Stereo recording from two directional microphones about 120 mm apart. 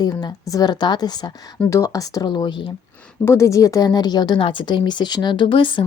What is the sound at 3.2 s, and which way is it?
Speech, 25° left (ahead or behind).